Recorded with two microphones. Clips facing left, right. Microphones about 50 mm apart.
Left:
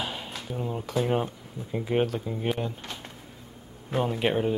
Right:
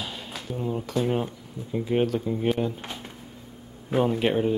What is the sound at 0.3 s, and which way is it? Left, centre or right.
Speech, centre.